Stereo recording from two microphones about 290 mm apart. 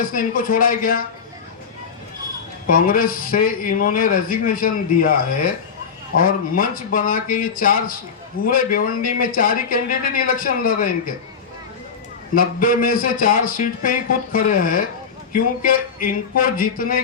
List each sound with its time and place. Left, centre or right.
0.0 s a man's voice: left
2.6 s a man's voice: left
12.3 s a man's voice: left